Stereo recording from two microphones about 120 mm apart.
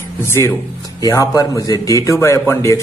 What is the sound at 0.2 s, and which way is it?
A man's voice, 20° left (ahead or behind).